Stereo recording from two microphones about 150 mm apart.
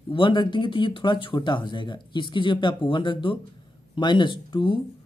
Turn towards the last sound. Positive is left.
turn(degrees=35)  # may be behind; listen again after turning